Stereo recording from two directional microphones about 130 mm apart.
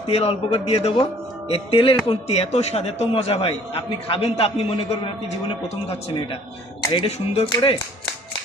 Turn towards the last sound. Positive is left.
turn(degrees=55)  # may be behind; listen again after turning